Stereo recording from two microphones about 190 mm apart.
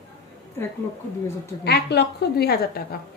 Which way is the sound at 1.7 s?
60° left (ahead or behind).